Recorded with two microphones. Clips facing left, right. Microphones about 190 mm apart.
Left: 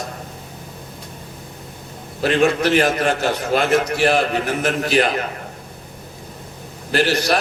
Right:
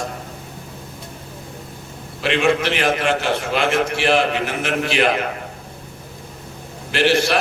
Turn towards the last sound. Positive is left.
turn(degrees=40)  # may be behind; listen again after turning